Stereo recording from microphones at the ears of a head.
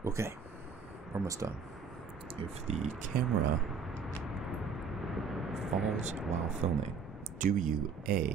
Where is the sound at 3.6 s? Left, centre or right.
Centre.